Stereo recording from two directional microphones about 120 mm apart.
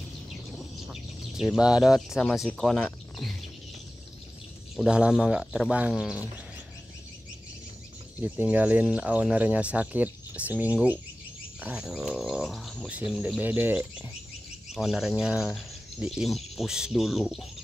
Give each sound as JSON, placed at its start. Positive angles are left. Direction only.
{"t": 0.6, "sound": "speech", "side_deg": 0}
{"t": 4.7, "sound": "speech", "side_deg": -5}
{"t": 8.2, "sound": "speech", "side_deg": -15}